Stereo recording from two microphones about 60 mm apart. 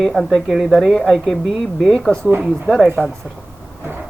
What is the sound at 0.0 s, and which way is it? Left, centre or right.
Speech, centre.